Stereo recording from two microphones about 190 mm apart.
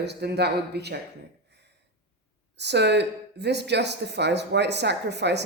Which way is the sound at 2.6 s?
65° right (ahead or behind).